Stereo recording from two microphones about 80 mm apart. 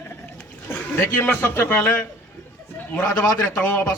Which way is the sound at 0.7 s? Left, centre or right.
Left.